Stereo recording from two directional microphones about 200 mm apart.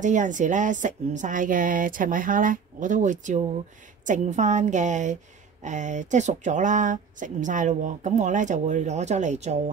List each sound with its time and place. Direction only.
0.0 s a woman's voice: 40° right (ahead or behind)